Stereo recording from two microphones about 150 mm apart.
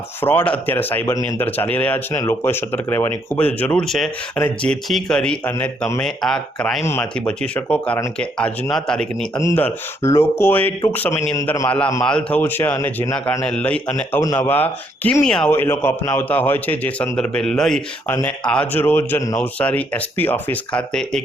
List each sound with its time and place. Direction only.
0.2 s a man's voice: 10° left (ahead or behind)
9.4 s a man's voice: 20° left (ahead or behind); by 17.8 s 5° left (ahead or behind)
18.1 s a man's voice: 15° left (ahead or behind)